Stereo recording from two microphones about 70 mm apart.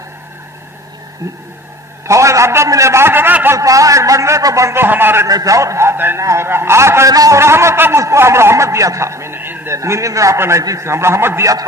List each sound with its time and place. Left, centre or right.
1.2 s a man's voice: right
3.5 s a man's voice: right
4.6 s a man's voice: right
5.3 s a man's voice: right
7.1 s a man's voice: right
7.3 s a man's voice: right
9.8 s a man's voice: right